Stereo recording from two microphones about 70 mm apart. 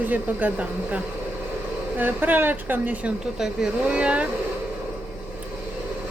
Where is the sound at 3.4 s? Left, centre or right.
Centre.